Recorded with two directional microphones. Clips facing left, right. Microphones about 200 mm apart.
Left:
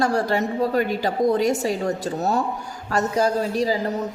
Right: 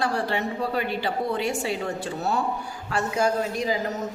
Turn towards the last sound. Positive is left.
turn(degrees=35)  # may be behind; listen again after turning